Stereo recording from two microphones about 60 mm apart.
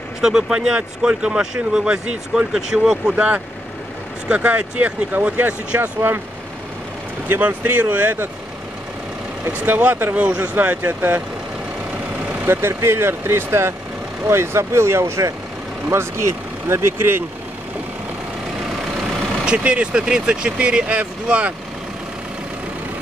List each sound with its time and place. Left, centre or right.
0.2 s speech: centre
3.2 s speech: right
5.8 s speech: right
7.2 s speech: right
9.5 s speech: right
12.4 s speech: right
19.4 s speech: centre